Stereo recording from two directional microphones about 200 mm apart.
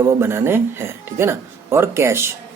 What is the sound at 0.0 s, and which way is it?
Speech, 10° right (ahead or behind).